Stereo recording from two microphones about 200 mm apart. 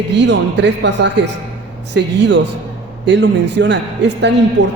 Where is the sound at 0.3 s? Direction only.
60° right (ahead or behind).